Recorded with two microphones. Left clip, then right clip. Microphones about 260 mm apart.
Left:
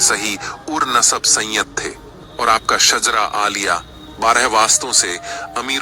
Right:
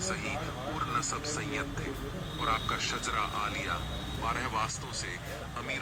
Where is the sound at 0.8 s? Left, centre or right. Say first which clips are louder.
Left 19 dB; left.